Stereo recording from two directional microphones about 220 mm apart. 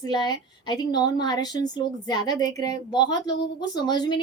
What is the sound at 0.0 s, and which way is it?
A woman's voice, 20° left (ahead or behind).